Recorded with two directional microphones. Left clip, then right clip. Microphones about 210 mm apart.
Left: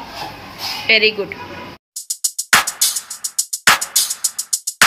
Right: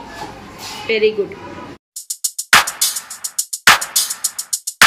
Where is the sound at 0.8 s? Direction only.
10° right (ahead or behind).